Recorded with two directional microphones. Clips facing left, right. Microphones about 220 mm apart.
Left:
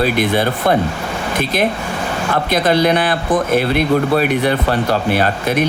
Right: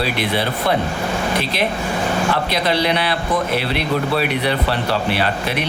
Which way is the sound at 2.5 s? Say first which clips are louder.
Left 5 dB; 45° left (ahead or behind).